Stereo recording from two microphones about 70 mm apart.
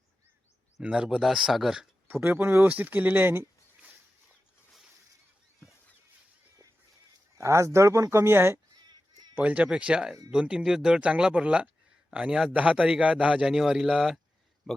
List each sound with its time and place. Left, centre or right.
0.8 s speech: centre
2.2 s speech: right
4.7 s a sound: centre
7.3 s speech: right
9.3 s speech: centre
13.4 s speech: centre